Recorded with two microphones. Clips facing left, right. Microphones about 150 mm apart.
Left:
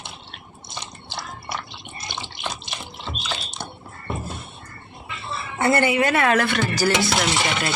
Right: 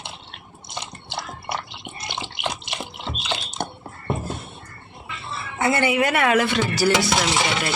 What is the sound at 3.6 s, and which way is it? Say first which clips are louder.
Music: right 6 dB; 55° right (ahead or behind).